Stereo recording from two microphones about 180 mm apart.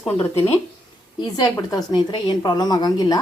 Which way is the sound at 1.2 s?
20° left (ahead or behind).